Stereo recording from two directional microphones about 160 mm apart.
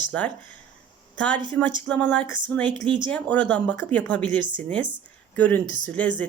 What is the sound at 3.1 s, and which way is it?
Speech, 10° left (ahead or behind).